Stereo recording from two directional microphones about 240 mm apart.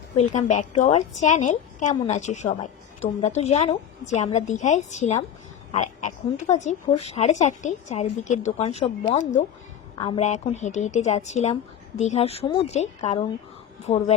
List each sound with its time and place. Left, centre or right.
0.2 s a woman's voice: left